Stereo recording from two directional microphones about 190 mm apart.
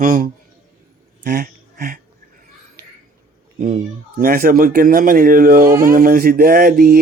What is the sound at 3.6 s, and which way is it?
A man's voice, 40° right (ahead or behind).